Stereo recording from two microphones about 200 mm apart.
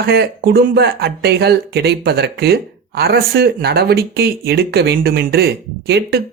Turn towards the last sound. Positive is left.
turn(degrees=-50)  # may be behind; listen again after turning